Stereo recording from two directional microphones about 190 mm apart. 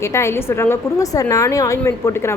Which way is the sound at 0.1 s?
15° left (ahead or behind).